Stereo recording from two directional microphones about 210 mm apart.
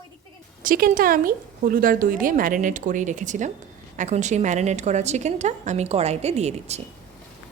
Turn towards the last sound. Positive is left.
turn(degrees=-30)  # may be behind; listen again after turning